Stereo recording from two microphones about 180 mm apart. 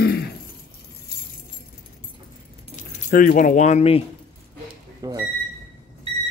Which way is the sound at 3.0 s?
50° left (ahead or behind).